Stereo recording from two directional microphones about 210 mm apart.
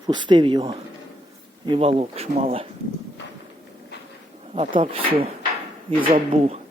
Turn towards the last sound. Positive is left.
turn(degrees=-30)  # may be behind; listen again after turning